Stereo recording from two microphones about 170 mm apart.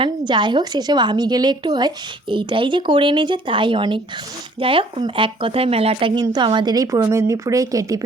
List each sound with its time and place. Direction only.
0.0 s speech: 25° right (ahead or behind)